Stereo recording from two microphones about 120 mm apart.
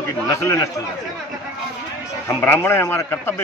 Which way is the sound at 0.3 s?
25° left (ahead or behind).